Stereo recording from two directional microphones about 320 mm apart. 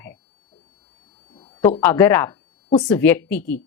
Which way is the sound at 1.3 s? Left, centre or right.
Centre.